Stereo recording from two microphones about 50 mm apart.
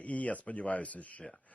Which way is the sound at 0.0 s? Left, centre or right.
Left.